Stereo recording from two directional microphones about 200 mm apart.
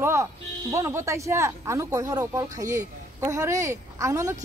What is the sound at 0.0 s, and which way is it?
Speech, 15° right (ahead or behind).